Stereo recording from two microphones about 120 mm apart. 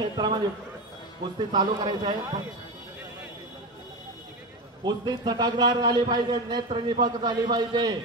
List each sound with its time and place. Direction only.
0.0 s a man's voice: 35° right (ahead or behind)
4.8 s a man's voice: 35° right (ahead or behind)